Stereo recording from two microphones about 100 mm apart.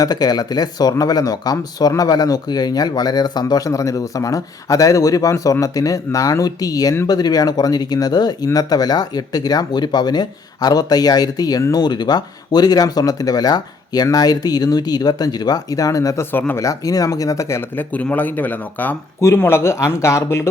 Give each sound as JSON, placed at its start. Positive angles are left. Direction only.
{"t": 0.0, "sound": "speech", "side_deg": 40}